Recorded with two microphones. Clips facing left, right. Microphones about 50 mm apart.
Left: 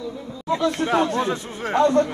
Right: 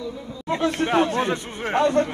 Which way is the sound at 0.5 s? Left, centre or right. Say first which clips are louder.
Left 1 dB; right.